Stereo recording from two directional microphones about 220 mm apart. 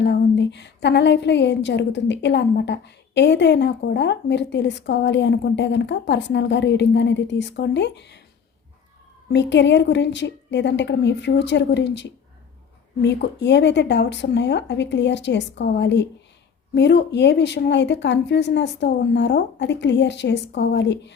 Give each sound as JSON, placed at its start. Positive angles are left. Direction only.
{"t": 0.0, "sound": "a woman's voice", "side_deg": 50}
{"t": 9.3, "sound": "a woman's voice", "side_deg": 50}